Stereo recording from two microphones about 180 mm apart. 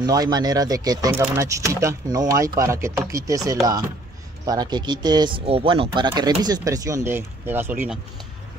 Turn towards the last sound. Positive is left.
turn(degrees=-5)  # may be behind; listen again after turning